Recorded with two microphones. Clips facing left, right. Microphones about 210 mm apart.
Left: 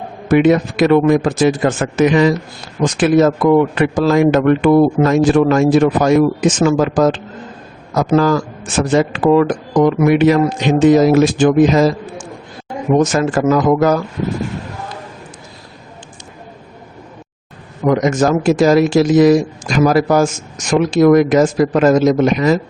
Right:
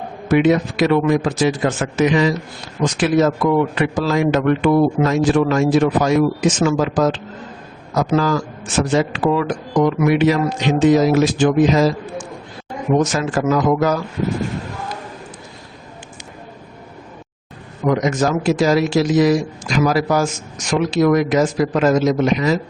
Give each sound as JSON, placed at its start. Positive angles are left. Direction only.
{"t": 0.3, "sound": "a man's voice", "side_deg": 50}
{"t": 13.1, "sound": "a man's voice", "side_deg": 50}
{"t": 17.8, "sound": "a man's voice", "side_deg": 50}